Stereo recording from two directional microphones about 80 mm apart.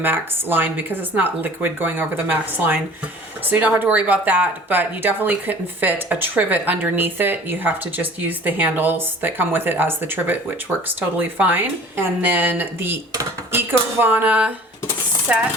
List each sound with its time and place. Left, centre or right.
0.0 s speech: right
15.3 s chopping: centre